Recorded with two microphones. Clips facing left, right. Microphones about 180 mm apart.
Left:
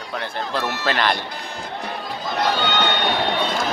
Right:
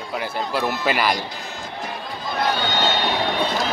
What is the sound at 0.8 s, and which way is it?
Speech, 10° right (ahead or behind).